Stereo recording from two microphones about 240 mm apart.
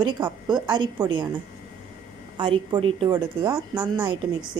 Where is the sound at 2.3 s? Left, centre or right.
Right.